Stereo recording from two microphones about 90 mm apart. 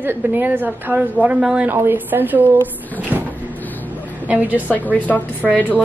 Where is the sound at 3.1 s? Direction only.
20° right (ahead or behind).